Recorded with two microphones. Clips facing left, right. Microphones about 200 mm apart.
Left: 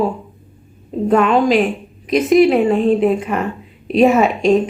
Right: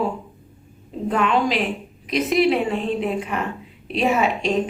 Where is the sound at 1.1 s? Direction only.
45° left (ahead or behind).